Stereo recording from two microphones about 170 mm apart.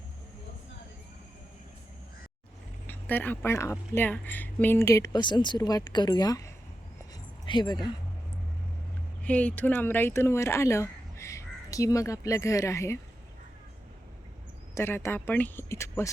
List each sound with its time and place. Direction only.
2.8 s speech: 10° left (ahead or behind); by 7.8 s 25° left (ahead or behind)
9.2 s speech: 10° left (ahead or behind)
14.8 s speech: 15° left (ahead or behind)